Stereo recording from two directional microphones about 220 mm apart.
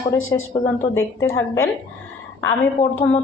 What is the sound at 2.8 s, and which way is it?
Speech, 30° left (ahead or behind).